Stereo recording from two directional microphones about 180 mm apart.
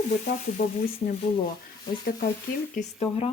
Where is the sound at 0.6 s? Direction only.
50° left (ahead or behind).